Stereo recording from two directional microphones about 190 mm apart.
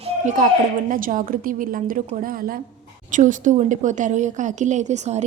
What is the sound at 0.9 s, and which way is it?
A woman's voice, 45° right (ahead or behind).